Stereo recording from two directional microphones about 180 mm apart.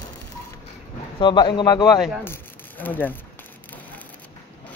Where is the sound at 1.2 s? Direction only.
25° left (ahead or behind).